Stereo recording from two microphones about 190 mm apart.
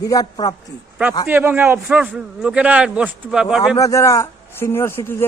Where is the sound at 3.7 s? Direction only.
15° left (ahead or behind).